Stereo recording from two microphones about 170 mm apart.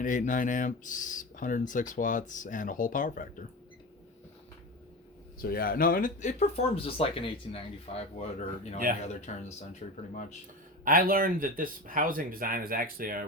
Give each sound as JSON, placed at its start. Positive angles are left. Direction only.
{"t": 0.0, "sound": "speech", "side_deg": 50}
{"t": 5.4, "sound": "speech", "side_deg": 60}
{"t": 6.7, "sound": "speech", "side_deg": 35}
{"t": 10.8, "sound": "speech", "side_deg": -60}